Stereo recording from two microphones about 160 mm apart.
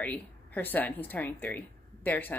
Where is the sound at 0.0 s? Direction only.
10° left (ahead or behind).